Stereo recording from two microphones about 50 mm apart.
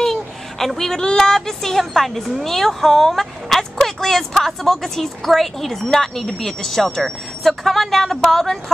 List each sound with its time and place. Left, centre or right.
0.0 s speech: centre